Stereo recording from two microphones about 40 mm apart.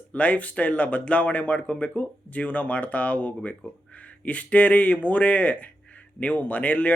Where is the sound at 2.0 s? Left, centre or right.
Left.